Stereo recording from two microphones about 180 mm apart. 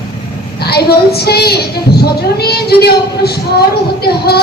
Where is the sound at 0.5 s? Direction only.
60° left (ahead or behind).